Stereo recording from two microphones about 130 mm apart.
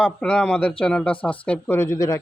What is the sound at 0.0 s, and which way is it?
Speech, 10° left (ahead or behind).